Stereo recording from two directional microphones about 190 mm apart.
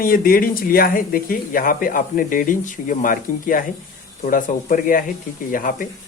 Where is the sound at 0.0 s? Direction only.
50° left (ahead or behind).